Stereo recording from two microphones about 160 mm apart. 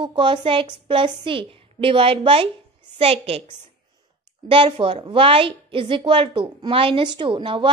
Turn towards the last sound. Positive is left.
turn(degrees=-30)  # may be behind; listen again after turning